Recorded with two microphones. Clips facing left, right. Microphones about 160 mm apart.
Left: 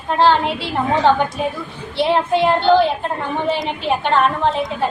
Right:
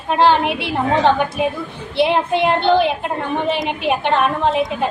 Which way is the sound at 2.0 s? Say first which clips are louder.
Even; 20° right (ahead or behind).